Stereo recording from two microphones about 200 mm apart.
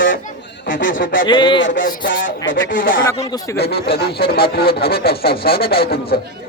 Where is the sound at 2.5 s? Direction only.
70° left (ahead or behind).